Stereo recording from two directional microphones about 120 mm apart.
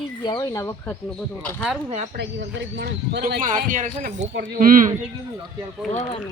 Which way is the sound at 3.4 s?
90° right.